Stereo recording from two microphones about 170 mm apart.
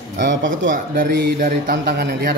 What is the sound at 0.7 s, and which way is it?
A man's voice, 55° right (ahead or behind).